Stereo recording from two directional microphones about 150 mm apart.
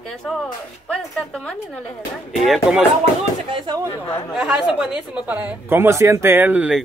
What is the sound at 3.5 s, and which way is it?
Speech, 30° right (ahead or behind).